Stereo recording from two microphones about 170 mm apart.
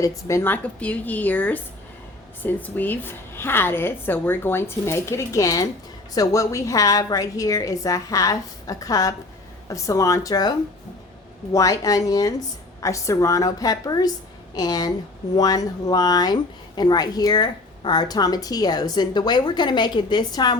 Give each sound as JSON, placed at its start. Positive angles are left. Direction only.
{"t": 0.0, "sound": "a woman's voice", "side_deg": 15}
{"t": 11.5, "sound": "speech", "side_deg": 20}